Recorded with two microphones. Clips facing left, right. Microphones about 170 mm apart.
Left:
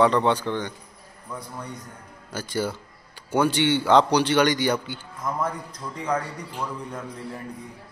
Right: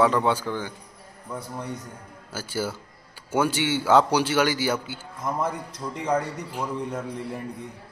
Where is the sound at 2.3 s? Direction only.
5° right (ahead or behind).